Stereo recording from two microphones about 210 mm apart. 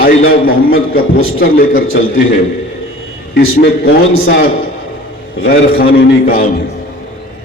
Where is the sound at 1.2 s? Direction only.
70° left (ahead or behind).